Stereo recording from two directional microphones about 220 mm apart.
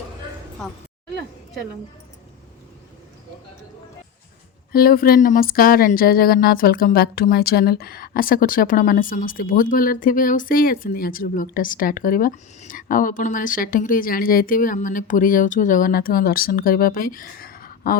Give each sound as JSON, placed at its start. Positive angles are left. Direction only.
{"t": 4.7, "sound": "speech", "side_deg": 40}